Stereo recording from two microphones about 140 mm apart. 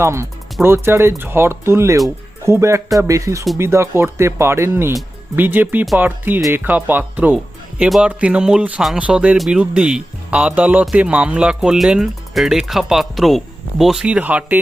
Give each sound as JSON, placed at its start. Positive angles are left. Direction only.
{"t": 0.0, "sound": "speech", "side_deg": -20}